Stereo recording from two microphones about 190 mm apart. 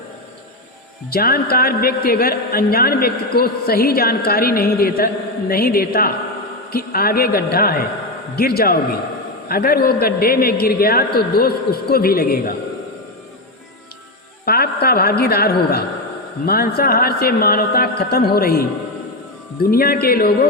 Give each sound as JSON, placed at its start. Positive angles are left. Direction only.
{"t": 1.1, "sound": "a man's voice", "side_deg": 50}
{"t": 14.4, "sound": "a woman's voice", "side_deg": 55}
{"t": 19.7, "sound": "a man's voice", "side_deg": 50}